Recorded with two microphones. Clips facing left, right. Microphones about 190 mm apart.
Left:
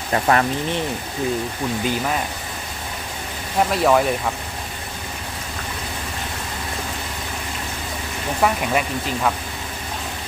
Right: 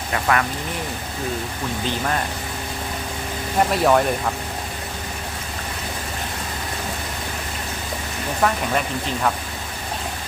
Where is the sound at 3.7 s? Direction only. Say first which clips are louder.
Left 1 dB; centre (ahead or behind).